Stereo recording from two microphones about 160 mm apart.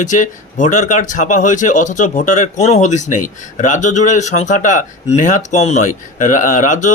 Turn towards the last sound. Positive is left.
turn(degrees=50)  # may be behind; listen again after turning